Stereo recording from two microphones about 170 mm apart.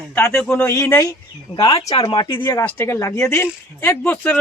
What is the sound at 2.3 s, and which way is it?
Speech, 15° left (ahead or behind).